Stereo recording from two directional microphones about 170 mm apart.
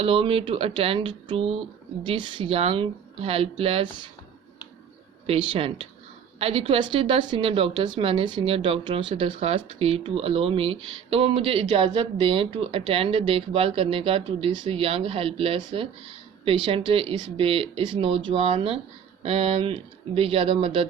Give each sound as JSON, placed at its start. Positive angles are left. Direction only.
{"t": 0.0, "sound": "a woman's voice", "side_deg": -30}
{"t": 5.2, "sound": "a woman's voice", "side_deg": -35}